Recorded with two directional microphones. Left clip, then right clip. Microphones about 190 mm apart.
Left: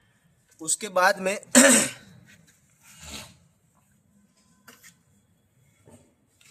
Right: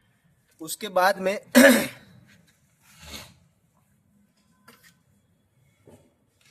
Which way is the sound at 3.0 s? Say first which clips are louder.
Left 1 dB; 30° right (ahead or behind).